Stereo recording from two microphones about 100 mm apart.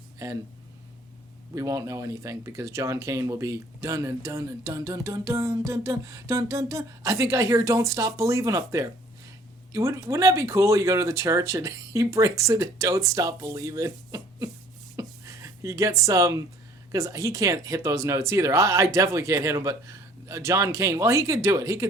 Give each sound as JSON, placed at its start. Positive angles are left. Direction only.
{"t": 0.2, "sound": "speech", "side_deg": -35}
{"t": 1.5, "sound": "speech", "side_deg": -35}
{"t": 14.9, "sound": "a sound", "side_deg": -30}
{"t": 16.9, "sound": "speech", "side_deg": -35}